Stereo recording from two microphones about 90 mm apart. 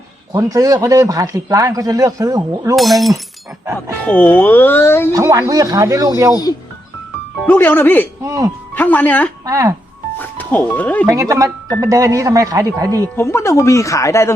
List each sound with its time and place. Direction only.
0.3 s speech: 40° right (ahead or behind)
2.7 s speech: centre (ahead or behind)
4.0 s speech: 20° left (ahead or behind)
5.1 s speech: 40° right (ahead or behind)
7.4 s speech: 20° left (ahead or behind)
8.2 s speech: 35° right (ahead or behind)
8.7 s speech: 20° left (ahead or behind)
9.5 s speech: 35° right (ahead or behind)
10.2 s speech: 20° left (ahead or behind)
11.1 s speech: 35° right (ahead or behind)
13.1 s speech: 30° left (ahead or behind)